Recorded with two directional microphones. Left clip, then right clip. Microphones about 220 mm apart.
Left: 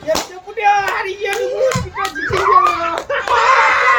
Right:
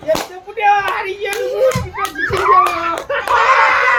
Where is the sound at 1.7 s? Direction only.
45° right (ahead or behind).